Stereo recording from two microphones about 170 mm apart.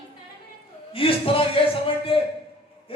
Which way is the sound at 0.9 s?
30° left (ahead or behind).